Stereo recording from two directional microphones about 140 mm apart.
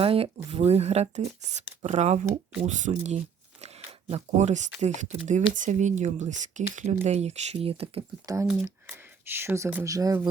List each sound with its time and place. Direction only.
0.0 s speech: 45° right (ahead or behind)
8.4 s speech: 15° right (ahead or behind)